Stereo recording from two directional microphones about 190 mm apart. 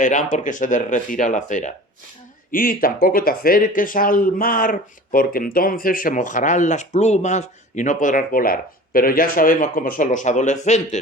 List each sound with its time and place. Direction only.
0.0 s speech: 45° left (ahead or behind)